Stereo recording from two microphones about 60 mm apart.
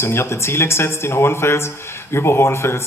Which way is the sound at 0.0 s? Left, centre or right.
Left.